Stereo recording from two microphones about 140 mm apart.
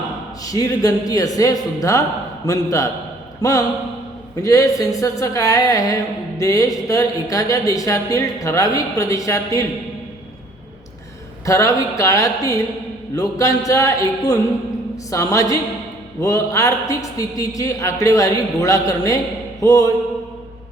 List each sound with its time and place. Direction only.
0.4 s speech: 25° left (ahead or behind)
11.4 s speech: 20° left (ahead or behind)